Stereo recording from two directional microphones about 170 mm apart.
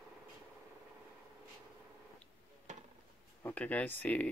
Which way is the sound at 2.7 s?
45° right (ahead or behind).